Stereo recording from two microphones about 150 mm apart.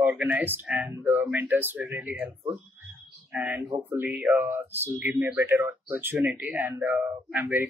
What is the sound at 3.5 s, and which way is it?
Speech, 20° right (ahead or behind).